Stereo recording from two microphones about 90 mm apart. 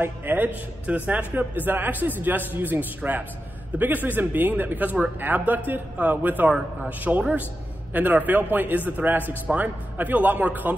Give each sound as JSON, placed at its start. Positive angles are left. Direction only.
{"t": 0.0, "sound": "a man's voice", "side_deg": -20}